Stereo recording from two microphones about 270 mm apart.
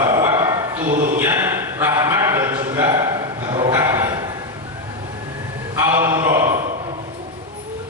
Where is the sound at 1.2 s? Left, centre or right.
Centre.